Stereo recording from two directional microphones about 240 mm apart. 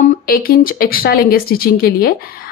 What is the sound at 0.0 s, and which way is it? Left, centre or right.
Speech, left.